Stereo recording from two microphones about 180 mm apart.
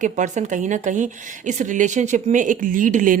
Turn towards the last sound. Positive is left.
turn(degrees=-45)  # may be behind; listen again after turning